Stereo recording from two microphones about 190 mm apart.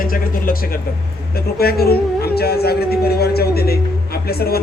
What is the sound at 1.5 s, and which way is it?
Speech, 55° left (ahead or behind).